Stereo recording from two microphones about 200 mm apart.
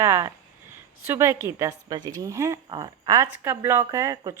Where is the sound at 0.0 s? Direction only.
15° right (ahead or behind).